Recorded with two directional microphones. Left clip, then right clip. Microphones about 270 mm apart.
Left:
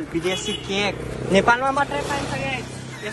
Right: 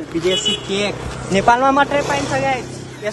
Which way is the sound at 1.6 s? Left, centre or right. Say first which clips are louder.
Right 7 dB; right.